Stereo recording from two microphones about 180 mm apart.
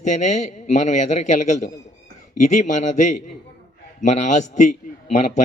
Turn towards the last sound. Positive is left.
turn(degrees=40)  # may be behind; listen again after turning